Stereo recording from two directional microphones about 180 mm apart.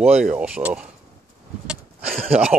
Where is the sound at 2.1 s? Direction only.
35° right (ahead or behind).